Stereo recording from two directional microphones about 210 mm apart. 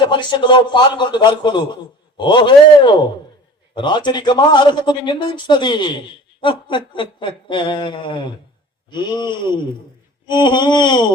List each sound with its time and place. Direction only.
0.0 s a man's voice: 20° left (ahead or behind)